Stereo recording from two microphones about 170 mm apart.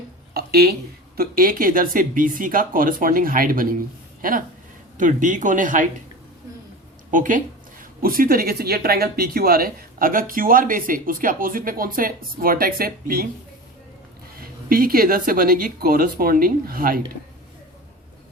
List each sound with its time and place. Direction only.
0.3 s a woman's voice: 65° right (ahead or behind); by 5.9 s 50° right (ahead or behind)
7.1 s a woman's voice: 50° right (ahead or behind)
14.3 s a woman's voice: 60° right (ahead or behind)